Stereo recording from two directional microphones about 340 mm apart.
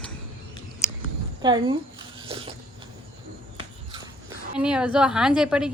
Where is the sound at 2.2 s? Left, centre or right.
Centre.